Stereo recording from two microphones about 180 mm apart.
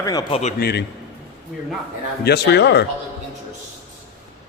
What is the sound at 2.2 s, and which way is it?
Speech, 65° left (ahead or behind).